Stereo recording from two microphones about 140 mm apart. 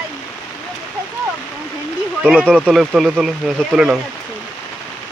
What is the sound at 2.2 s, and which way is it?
Speech, 5° right (ahead or behind).